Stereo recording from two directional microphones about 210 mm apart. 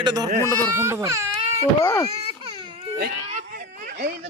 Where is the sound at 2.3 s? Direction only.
25° right (ahead or behind).